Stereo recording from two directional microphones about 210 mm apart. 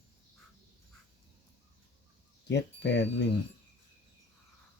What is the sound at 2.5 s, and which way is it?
Speech, 55° left (ahead or behind).